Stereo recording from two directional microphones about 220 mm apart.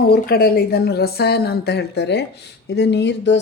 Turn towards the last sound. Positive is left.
turn(degrees=50)  # may be behind; listen again after turning